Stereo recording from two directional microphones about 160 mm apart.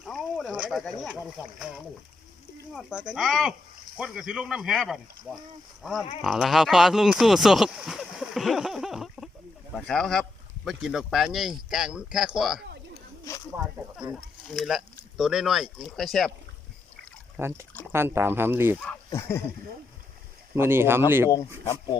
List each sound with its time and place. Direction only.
0.0 s a sound: centre (ahead or behind)
0.5 s speech: 5° right (ahead or behind)
12.6 s a sound: 90° right
13.6 s speech: 5° right (ahead or behind)
17.3 s speech: 15° right (ahead or behind)
18.9 s speech: 15° left (ahead or behind)
20.6 s speech: 15° right (ahead or behind)
21.2 s speech: 20° left (ahead or behind)